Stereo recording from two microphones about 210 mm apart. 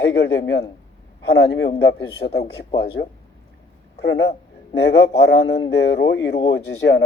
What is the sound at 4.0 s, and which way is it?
Speech, 50° left (ahead or behind).